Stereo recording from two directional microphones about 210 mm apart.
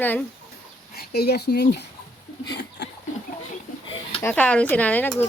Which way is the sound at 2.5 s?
55° left (ahead or behind).